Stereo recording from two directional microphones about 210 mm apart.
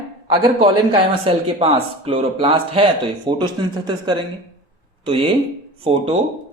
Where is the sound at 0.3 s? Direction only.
25° right (ahead or behind).